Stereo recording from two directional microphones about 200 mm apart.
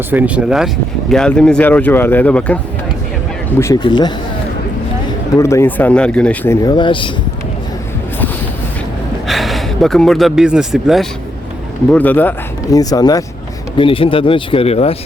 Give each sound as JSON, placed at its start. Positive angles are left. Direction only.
{"t": 0.1, "sound": "speech", "side_deg": -5}
{"t": 3.6, "sound": "speech", "side_deg": 20}
{"t": 5.4, "sound": "speech", "side_deg": 15}
{"t": 9.2, "sound": "speech", "side_deg": 0}